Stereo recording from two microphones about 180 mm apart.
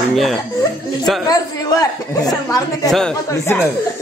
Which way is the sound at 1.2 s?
20° left (ahead or behind).